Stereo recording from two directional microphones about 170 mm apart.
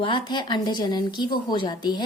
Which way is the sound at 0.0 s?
25° left (ahead or behind).